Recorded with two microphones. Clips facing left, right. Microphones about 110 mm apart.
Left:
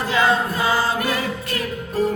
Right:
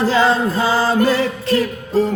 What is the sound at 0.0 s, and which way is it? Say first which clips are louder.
Music: right 4 dB; 30° right (ahead or behind).